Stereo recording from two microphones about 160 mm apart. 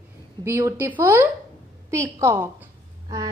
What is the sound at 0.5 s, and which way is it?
A woman's voice, 15° right (ahead or behind).